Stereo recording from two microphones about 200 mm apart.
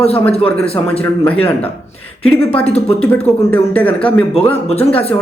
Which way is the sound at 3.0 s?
10° left (ahead or behind).